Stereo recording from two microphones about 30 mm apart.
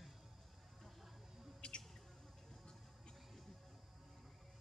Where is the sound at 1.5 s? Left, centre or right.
Left.